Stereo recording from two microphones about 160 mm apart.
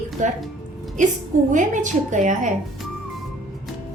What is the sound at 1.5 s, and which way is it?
A woman's voice, 50° right (ahead or behind).